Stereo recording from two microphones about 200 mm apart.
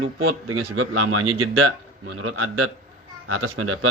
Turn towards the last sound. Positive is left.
turn(degrees=-90)